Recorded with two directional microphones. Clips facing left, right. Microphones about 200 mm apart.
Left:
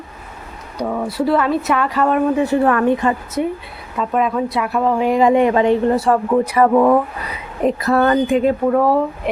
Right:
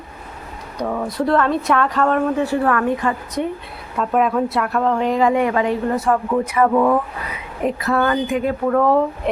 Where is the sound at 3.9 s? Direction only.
Centre (ahead or behind); by 8.4 s 35° left (ahead or behind).